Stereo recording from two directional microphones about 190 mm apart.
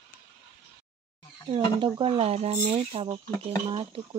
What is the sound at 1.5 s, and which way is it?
Speech, 25° right (ahead or behind).